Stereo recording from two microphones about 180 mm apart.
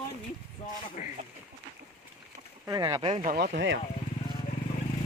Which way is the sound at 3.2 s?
60° right (ahead or behind).